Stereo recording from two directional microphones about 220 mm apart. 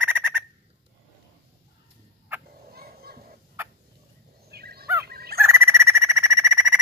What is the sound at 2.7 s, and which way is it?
Children playing, 45° right (ahead or behind).